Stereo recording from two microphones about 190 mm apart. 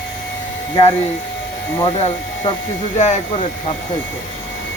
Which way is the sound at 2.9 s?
40° left (ahead or behind).